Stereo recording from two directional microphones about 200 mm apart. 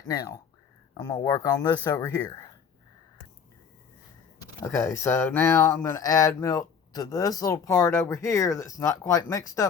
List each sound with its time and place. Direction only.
0.0 s speech: 20° left (ahead or behind)
4.4 s speech: 15° left (ahead or behind)